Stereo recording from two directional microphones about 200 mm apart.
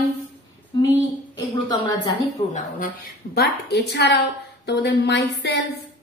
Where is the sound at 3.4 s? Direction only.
55° left (ahead or behind).